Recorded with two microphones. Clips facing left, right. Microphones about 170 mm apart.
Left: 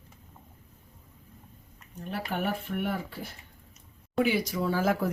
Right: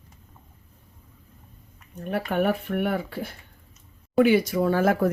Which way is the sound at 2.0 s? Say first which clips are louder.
Right 7 dB; 60° right (ahead or behind).